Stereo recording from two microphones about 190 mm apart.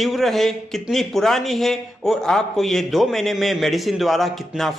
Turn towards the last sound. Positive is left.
turn(degrees=0)  # may be behind; listen again after turning